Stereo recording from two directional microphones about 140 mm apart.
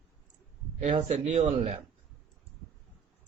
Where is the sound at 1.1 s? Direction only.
55° right (ahead or behind).